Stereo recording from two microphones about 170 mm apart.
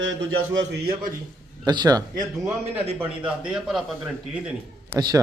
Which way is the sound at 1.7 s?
25° right (ahead or behind).